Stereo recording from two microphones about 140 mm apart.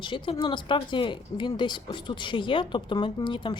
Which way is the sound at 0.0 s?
35° left (ahead or behind).